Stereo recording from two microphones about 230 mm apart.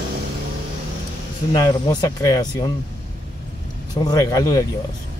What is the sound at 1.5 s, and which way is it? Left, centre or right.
Speech, centre.